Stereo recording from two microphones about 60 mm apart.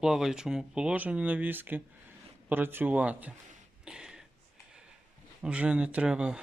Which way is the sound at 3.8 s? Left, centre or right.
Centre.